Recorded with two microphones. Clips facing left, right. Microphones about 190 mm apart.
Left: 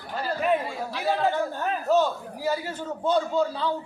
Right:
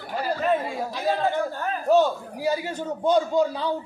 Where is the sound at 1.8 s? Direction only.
15° right (ahead or behind).